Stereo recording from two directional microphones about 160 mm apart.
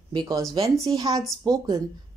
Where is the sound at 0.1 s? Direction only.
25° right (ahead or behind).